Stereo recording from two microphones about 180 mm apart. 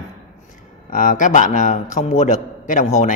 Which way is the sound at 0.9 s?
45° left (ahead or behind).